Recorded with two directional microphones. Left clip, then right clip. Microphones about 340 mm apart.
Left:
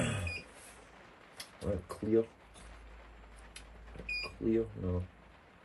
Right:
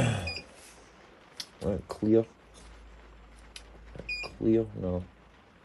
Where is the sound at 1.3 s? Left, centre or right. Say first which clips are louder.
Right 5 dB; right.